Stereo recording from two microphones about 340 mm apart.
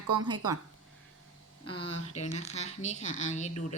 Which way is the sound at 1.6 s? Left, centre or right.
Centre.